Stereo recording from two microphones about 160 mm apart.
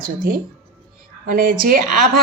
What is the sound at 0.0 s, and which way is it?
A woman's voice, 60° right (ahead or behind).